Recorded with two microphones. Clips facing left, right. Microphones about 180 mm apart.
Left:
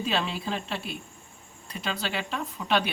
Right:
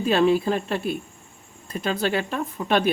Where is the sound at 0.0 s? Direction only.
50° right (ahead or behind).